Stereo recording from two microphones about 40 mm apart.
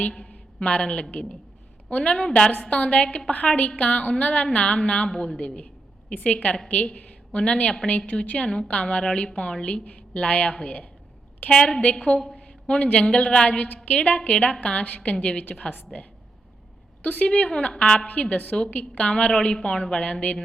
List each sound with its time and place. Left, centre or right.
0.1 s a man's voice: left
2.5 s a woman's voice: left
7.9 s a woman's voice: left
11.5 s a woman's voice: centre
11.8 s a woman's voice: left
17.5 s a woman's voice: left
18.0 s a woman's voice: left